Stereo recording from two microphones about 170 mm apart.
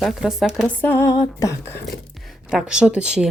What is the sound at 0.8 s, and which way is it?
Music, 15° left (ahead or behind).